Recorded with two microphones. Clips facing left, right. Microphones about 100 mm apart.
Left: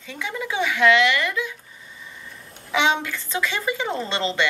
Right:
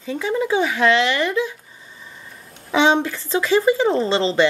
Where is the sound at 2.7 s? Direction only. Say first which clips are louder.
Right 5 dB; 35° right (ahead or behind).